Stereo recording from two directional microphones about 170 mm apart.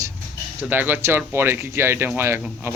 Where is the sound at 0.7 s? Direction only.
10° right (ahead or behind).